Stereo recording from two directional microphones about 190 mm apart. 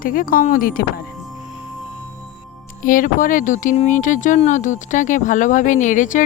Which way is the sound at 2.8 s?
45° left (ahead or behind).